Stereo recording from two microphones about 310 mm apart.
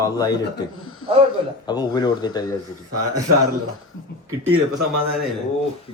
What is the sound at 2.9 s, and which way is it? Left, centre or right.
Speech, right.